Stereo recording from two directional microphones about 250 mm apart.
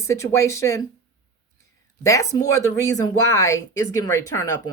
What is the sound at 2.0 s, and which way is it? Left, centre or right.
Speech, centre.